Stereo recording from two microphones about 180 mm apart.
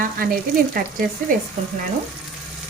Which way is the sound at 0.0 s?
55° right (ahead or behind).